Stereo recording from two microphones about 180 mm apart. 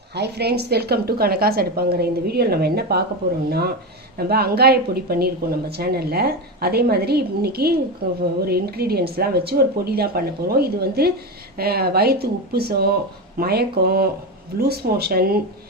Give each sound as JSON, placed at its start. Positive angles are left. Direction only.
{"t": 0.1, "sound": "speech", "side_deg": -65}
{"t": 4.2, "sound": "speech", "side_deg": -60}